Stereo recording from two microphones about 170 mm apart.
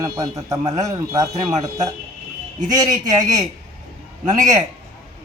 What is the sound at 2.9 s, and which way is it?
Speech, 45° right (ahead or behind).